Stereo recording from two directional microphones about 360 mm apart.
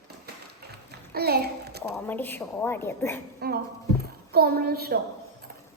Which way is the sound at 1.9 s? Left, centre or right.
Centre.